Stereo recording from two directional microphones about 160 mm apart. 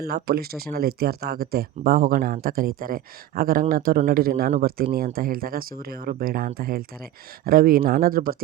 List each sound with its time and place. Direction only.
0.0 s speech: 75° right (ahead or behind)